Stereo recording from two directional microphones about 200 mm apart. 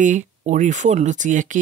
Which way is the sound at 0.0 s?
40° right (ahead or behind).